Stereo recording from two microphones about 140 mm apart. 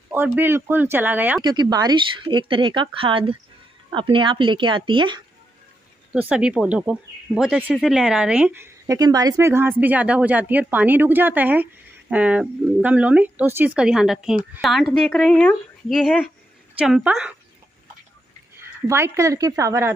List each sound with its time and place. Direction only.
0.4 s speech: 15° right (ahead or behind)
1.4 s speech: 30° right (ahead or behind)
6.1 s speech: 10° right (ahead or behind); by 16.0 s 5° left (ahead or behind)
16.7 s speech: 5° right (ahead or behind)
18.9 s speech: 20° right (ahead or behind)